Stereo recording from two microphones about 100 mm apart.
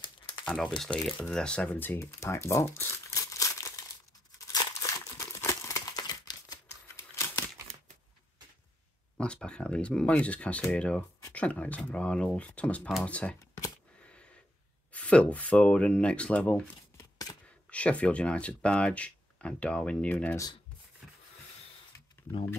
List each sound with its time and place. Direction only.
0.5 s speech: 5° left (ahead or behind); by 3.8 s 35° left (ahead or behind)
4.4 s crumpling: 35° left (ahead or behind)
7.0 s typewriter: 30° left (ahead or behind)
9.1 s speech: 10° left (ahead or behind)
14.9 s speech: 15° left (ahead or behind)
17.6 s speech: 10° left (ahead or behind)